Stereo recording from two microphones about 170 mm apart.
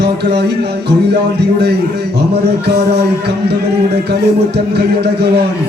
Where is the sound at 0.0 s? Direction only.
75° right (ahead or behind).